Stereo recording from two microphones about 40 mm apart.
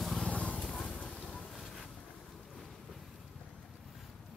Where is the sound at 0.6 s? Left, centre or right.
Centre.